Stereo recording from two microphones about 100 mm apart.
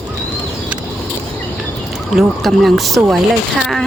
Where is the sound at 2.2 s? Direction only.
Centre (ahead or behind).